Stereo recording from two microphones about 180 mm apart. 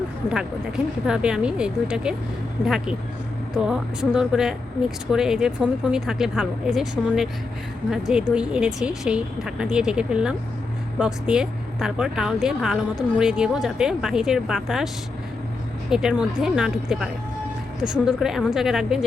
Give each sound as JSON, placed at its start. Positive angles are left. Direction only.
{"t": 1.0, "sound": "a woman's voice", "side_deg": -5}
{"t": 15.9, "sound": "a woman's voice", "side_deg": -5}